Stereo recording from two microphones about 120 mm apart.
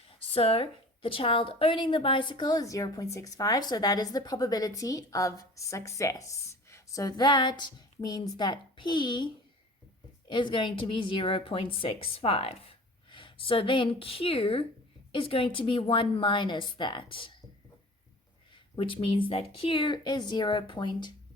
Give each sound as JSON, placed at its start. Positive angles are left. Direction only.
{"t": 0.3, "sound": "a woman's voice", "side_deg": 55}
{"t": 18.8, "sound": "a woman's voice", "side_deg": 45}